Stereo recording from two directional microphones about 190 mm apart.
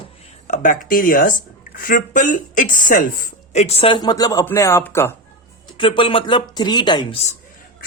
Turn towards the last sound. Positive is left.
turn(degrees=25)  # may be behind; listen again after turning